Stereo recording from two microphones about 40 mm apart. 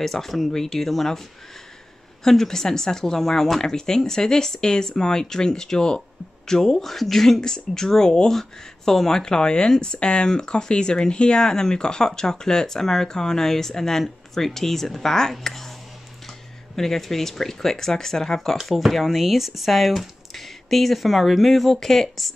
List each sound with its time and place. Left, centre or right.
0.0 s speech: centre
2.2 s speech: centre
16.7 s speech: centre
18.7 s speech: centre